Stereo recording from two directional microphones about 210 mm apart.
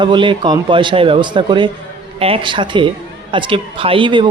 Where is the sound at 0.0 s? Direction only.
20° right (ahead or behind).